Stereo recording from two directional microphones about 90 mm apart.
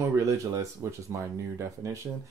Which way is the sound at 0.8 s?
35° right (ahead or behind).